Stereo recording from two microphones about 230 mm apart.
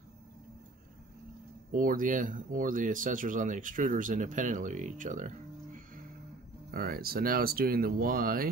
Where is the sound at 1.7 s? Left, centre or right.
Right.